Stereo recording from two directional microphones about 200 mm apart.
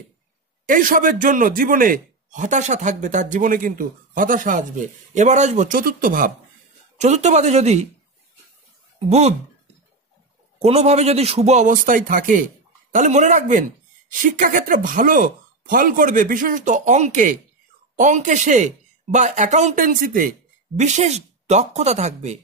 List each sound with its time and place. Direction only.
0.7 s speech: 40° right (ahead or behind)
10.6 s speech: 30° right (ahead or behind)